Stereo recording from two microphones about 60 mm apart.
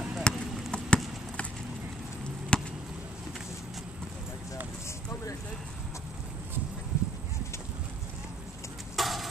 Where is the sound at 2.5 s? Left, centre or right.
Centre.